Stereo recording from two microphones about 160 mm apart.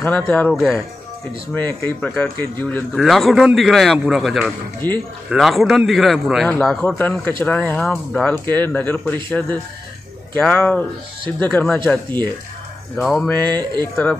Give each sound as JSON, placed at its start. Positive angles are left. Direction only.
{"t": 0.0, "sound": "a man's voice", "side_deg": 10}
{"t": 0.6, "sound": "a man's voice", "side_deg": 0}
{"t": 1.5, "sound": "a man's voice", "side_deg": 10}
{"t": 13.0, "sound": "a man's voice", "side_deg": 0}
{"t": 13.5, "sound": "speech", "side_deg": -25}